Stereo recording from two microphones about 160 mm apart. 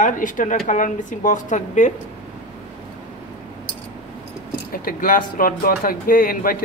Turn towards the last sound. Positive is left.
turn(degrees=65)  # may be behind; listen again after turning